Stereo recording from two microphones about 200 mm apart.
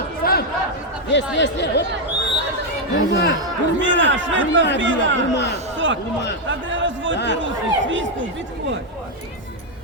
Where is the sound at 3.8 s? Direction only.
70° right (ahead or behind).